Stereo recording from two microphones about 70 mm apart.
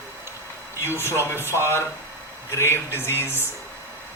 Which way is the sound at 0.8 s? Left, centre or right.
Left.